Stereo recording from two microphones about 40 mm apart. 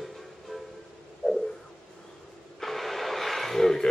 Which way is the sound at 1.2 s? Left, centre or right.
Centre.